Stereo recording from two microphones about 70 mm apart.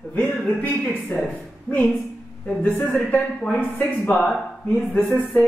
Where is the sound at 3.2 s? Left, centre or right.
Centre.